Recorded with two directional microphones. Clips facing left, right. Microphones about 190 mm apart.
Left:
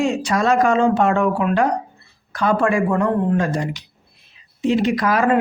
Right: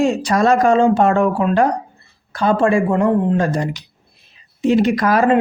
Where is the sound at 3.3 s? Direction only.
35° right (ahead or behind).